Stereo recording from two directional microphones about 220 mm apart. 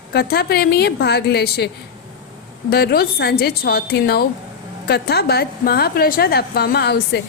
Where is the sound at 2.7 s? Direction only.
45° left (ahead or behind).